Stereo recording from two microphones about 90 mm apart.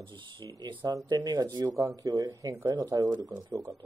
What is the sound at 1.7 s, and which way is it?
Speech, 35° right (ahead or behind).